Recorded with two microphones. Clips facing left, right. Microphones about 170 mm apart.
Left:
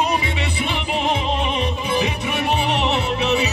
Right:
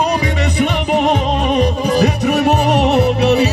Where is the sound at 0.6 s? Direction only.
40° right (ahead or behind).